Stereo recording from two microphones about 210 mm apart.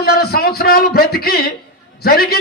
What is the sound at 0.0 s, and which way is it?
A man's voice, 50° left (ahead or behind).